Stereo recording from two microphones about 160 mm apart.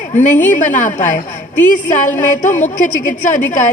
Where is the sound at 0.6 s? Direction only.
55° left (ahead or behind).